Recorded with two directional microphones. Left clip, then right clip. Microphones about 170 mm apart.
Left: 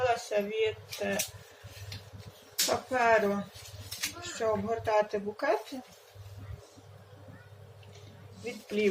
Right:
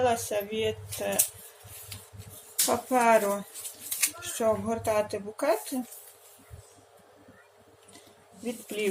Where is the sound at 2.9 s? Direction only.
40° right (ahead or behind).